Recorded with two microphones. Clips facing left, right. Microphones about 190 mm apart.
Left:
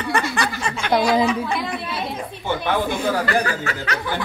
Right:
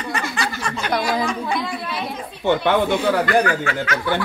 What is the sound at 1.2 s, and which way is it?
Speech, 5° left (ahead or behind).